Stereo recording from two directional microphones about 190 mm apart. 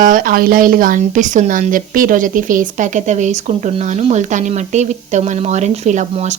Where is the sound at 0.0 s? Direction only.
45° right (ahead or behind).